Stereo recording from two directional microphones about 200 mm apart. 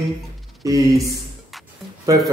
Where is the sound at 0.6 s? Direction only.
15° right (ahead or behind).